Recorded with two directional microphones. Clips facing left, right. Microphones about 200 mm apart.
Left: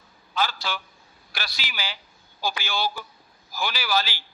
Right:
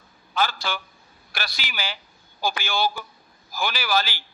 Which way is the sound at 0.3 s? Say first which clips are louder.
Right 2 dB; 50° right (ahead or behind).